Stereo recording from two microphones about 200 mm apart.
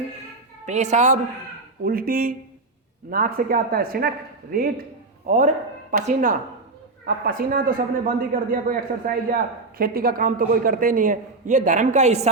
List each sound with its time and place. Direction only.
0.6 s a woman's voice: 35° right (ahead or behind)
1.8 s a woman's voice: 45° right (ahead or behind)